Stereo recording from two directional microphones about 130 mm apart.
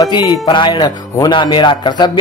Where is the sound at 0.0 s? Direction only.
35° left (ahead or behind).